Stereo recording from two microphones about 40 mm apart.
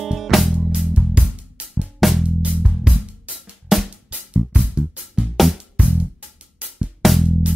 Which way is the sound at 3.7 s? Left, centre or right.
Centre.